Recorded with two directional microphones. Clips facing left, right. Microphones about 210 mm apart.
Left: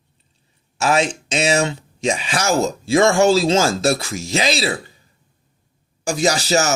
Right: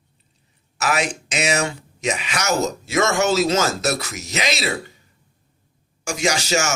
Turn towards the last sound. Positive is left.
turn(degrees=35)  # may be behind; listen again after turning